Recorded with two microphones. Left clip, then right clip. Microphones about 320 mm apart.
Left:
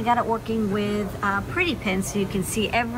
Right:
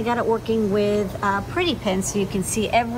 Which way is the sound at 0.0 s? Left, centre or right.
Centre.